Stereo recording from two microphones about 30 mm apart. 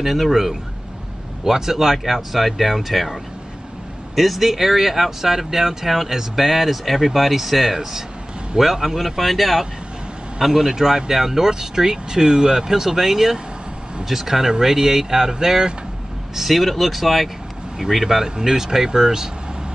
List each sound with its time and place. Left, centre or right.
0.0 s speech: centre
16.3 s speech: centre
17.7 s speech: centre